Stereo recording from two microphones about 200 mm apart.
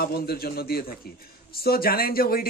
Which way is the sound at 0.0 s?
50° left (ahead or behind).